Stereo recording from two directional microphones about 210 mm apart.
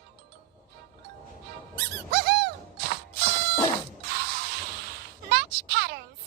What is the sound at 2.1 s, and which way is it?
Squeak, 50° right (ahead or behind).